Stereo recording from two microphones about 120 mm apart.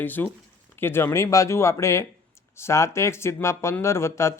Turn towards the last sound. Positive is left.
turn(degrees=25)  # may be behind; listen again after turning